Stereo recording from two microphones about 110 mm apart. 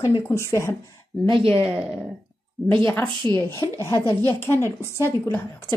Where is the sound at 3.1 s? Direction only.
45° right (ahead or behind).